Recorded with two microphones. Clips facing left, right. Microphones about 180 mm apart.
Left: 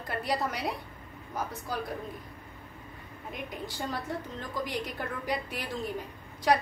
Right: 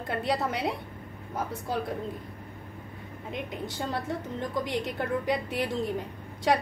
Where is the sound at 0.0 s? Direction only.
25° right (ahead or behind).